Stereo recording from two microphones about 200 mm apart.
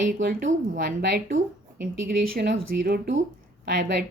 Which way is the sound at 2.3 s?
55° right (ahead or behind).